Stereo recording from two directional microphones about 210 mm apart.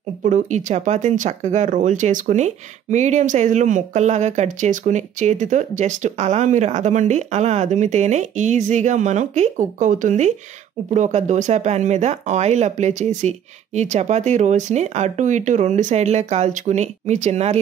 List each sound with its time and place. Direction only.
0.2 s speech: 35° right (ahead or behind)